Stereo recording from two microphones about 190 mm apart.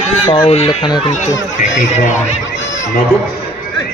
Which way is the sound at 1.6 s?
40° left (ahead or behind).